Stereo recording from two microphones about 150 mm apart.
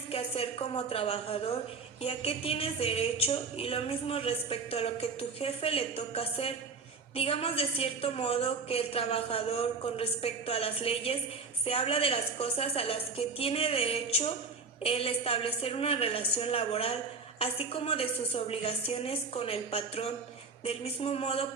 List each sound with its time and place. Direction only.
0.1 s a woman's voice: 40° left (ahead or behind)